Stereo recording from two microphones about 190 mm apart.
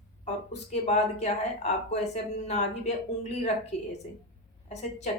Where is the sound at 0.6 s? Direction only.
35° left (ahead or behind).